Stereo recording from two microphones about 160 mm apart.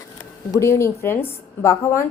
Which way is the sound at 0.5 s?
15° left (ahead or behind).